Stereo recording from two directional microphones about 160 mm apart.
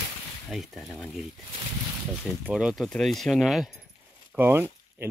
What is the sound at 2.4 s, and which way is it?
Speech, 5° right (ahead or behind).